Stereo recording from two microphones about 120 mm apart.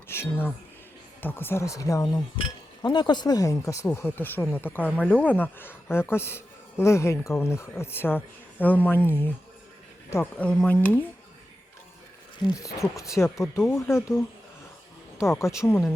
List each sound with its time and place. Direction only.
0.1 s speech: 20° left (ahead or behind)
2.3 s speech: 40° left (ahead or behind); by 9.3 s 15° left (ahead or behind)
10.3 s speech: 10° left (ahead or behind)
12.8 s speech: 25° left (ahead or behind)